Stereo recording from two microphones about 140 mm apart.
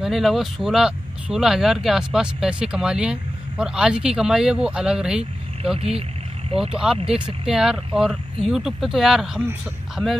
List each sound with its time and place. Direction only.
0.0 s speech: centre (ahead or behind)
6.5 s speech: 45° right (ahead or behind)
7.4 s speech: 5° right (ahead or behind)
10.0 s speech: 10° left (ahead or behind)